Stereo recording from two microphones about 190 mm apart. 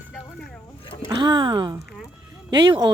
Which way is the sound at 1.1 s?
25° right (ahead or behind).